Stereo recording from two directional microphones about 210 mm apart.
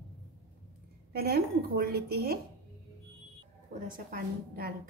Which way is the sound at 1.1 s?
45° right (ahead or behind).